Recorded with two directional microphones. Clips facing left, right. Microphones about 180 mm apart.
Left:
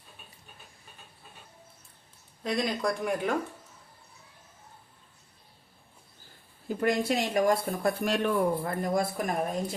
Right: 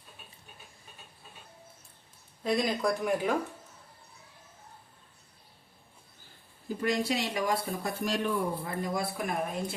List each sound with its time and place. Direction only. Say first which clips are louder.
2.4 s speech: right 1 dB; centre (ahead or behind)
6.7 s speech: left 3 dB; 55° left (ahead or behind); by 9.7 s 40° left (ahead or behind)